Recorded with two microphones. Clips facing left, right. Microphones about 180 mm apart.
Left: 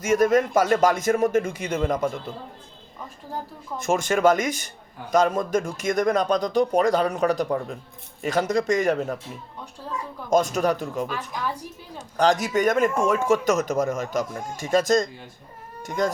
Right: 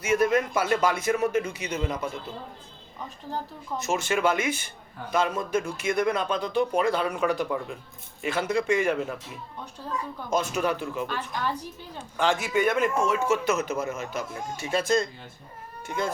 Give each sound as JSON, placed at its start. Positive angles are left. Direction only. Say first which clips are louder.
{"t": 0.0, "sound": "speech", "louder": "left 4 dB", "side_deg": 45}
{"t": 3.8, "sound": "a man's voice", "louder": "left 4 dB", "side_deg": 50}
{"t": 10.2, "sound": "speech", "louder": "left 6 dB", "side_deg": 45}
{"t": 12.1, "sound": "a man's voice", "louder": "left 4 dB", "side_deg": 40}